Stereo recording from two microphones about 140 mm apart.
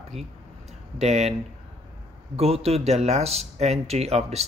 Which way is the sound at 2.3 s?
45° right (ahead or behind).